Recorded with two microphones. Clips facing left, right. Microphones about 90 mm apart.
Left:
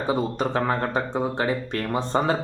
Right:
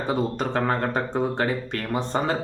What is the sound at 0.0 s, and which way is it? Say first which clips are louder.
Speech: left 1 dB; 20° left (ahead or behind).